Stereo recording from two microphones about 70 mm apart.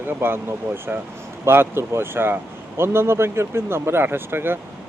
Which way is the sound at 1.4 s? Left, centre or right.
Right.